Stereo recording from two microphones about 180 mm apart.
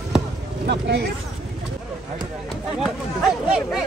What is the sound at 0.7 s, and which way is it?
Speech, 65° right (ahead or behind).